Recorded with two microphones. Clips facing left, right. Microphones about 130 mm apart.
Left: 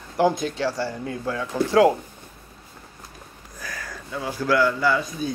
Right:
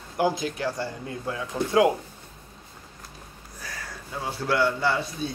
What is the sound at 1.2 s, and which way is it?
Speech, 75° left (ahead or behind).